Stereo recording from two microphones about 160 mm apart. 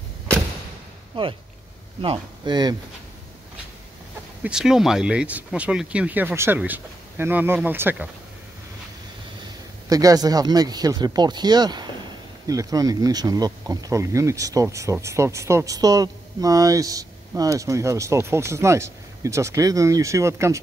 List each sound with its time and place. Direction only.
1.1 s speech: 30° right (ahead or behind)
4.4 s speech: 5° right (ahead or behind)
9.8 s speech: 20° right (ahead or behind)